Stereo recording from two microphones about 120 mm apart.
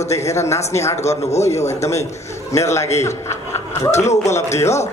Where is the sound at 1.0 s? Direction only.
65° left (ahead or behind).